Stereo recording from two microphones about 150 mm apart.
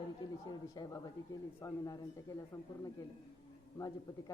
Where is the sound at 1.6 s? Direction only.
25° left (ahead or behind).